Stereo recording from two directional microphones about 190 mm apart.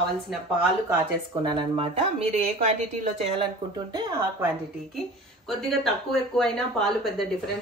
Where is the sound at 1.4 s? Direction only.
25° right (ahead or behind).